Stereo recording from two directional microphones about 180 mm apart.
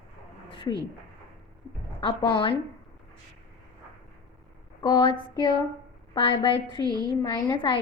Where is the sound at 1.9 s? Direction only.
25° left (ahead or behind).